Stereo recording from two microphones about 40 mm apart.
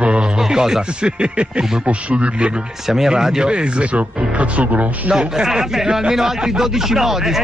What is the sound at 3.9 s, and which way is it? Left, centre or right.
Speech, right.